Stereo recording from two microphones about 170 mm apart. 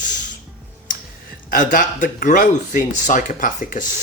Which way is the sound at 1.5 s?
55° left (ahead or behind).